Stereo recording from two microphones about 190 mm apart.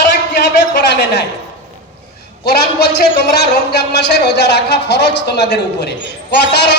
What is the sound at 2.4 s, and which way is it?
A man's voice, 55° left (ahead or behind).